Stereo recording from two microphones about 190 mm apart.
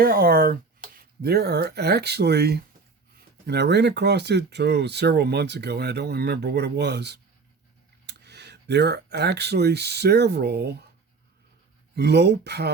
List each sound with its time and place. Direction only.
0.0 s speech: 50° right (ahead or behind)
11.9 s speech: 60° right (ahead or behind)